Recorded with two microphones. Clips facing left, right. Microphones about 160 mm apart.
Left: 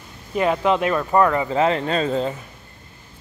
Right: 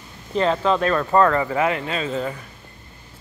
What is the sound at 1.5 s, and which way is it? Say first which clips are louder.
Speech: left 3 dB; 30° left (ahead or behind).